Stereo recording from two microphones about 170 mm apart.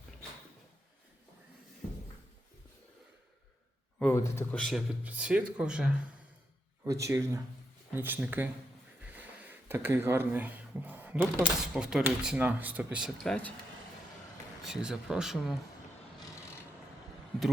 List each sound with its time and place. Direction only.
4.0 s speech: 15° left (ahead or behind)
4.5 s speech: centre (ahead or behind)
6.8 s speech: 20° right (ahead or behind)
13.2 s speech: 10° left (ahead or behind)
14.6 s speech: 5° right (ahead or behind)